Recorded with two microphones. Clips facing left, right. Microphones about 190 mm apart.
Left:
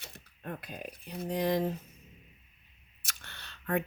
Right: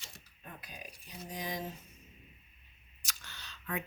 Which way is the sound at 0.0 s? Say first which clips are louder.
Left 9 dB; 60° left (ahead or behind).